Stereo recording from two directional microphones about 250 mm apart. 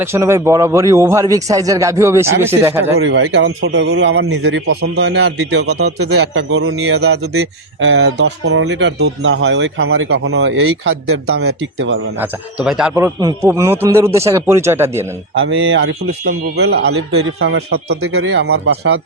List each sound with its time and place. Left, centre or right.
0.0 s speech: centre
3.0 s speech: right
6.0 s a man's voice: right
7.9 s speech: right
12.2 s speech: centre
15.4 s speech: right
16.9 s a man's voice: right
17.4 s speech: right